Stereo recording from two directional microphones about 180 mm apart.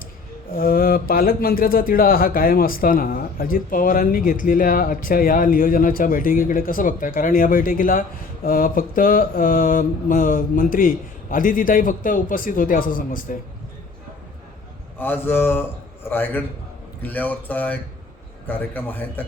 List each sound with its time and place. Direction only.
0.5 s speech: 55° left (ahead or behind)
14.9 s speech: 10° left (ahead or behind)